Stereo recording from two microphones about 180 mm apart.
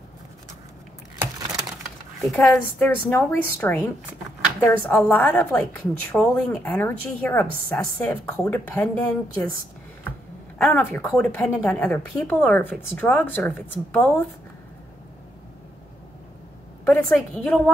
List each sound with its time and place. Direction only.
1.2 s a sound: 20° right (ahead or behind)
2.2 s a woman's voice: 10° left (ahead or behind)
10.6 s a woman's voice: 10° left (ahead or behind)
16.8 s a woman's voice: 5° left (ahead or behind)